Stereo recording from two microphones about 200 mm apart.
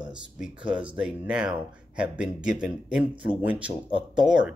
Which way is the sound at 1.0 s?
5° right (ahead or behind).